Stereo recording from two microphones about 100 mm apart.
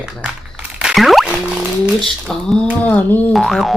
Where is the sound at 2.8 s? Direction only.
15° left (ahead or behind).